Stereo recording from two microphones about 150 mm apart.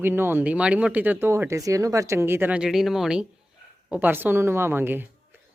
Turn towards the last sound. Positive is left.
turn(degrees=-15)  # may be behind; listen again after turning